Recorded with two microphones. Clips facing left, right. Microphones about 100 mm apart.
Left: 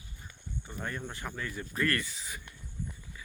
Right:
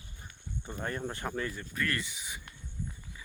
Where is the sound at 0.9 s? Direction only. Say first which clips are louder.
Right 4 dB; 35° right (ahead or behind).